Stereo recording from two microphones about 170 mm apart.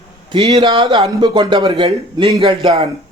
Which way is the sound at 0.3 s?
25° right (ahead or behind).